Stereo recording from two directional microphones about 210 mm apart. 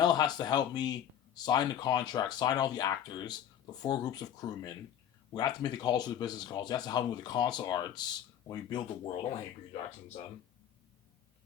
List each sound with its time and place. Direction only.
0.0 s speech: 20° left (ahead or behind)